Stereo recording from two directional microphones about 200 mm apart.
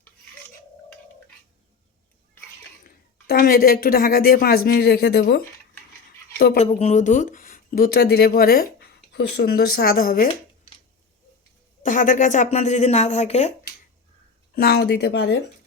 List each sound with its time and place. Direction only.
2.8 s a woman's voice: 45° left (ahead or behind)
6.6 s speech: 30° left (ahead or behind)
11.8 s speech: 40° left (ahead or behind)
14.5 s speech: 50° left (ahead or behind)